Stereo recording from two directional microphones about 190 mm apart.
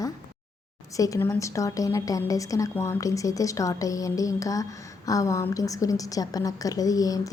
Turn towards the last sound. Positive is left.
turn(degrees=20)  # may be behind; listen again after turning